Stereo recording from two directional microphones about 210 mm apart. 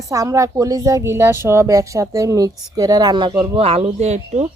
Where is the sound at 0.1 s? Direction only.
15° right (ahead or behind).